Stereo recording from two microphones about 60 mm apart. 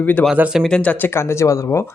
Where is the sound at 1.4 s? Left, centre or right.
Left.